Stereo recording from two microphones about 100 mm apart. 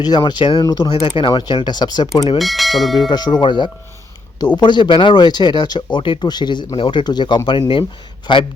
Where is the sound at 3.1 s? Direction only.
45° left (ahead or behind).